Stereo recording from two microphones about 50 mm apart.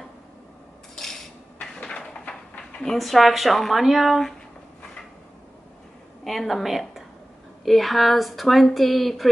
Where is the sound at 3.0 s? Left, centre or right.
Centre.